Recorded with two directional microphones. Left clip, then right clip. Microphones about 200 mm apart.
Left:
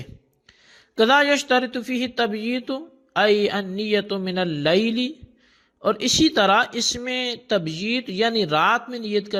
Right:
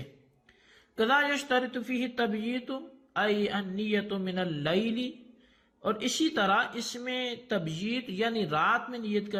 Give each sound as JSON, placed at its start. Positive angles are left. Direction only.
{"t": 0.9, "sound": "speech", "side_deg": 50}